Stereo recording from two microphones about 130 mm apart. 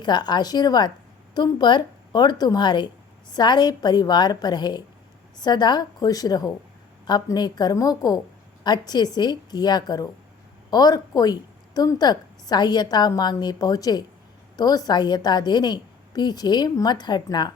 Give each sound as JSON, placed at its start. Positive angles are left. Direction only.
{"t": 0.0, "sound": "a woman's voice", "side_deg": 35}